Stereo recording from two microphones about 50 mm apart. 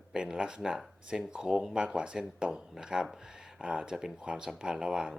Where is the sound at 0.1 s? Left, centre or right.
Centre.